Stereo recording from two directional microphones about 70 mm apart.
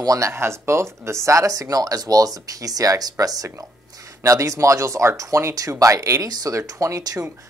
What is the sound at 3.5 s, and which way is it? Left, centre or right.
Speech, right.